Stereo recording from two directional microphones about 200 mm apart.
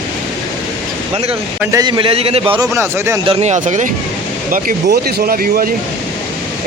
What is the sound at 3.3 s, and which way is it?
Speech, 35° right (ahead or behind).